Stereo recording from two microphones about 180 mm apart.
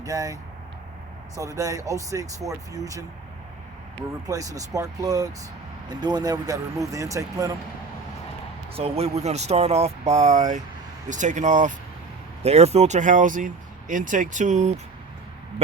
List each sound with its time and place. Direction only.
0.0 s speech: 20° right (ahead or behind)
1.4 s speech: 20° right (ahead or behind)
4.3 s speech: 20° right (ahead or behind)
8.7 s speech: 35° right (ahead or behind)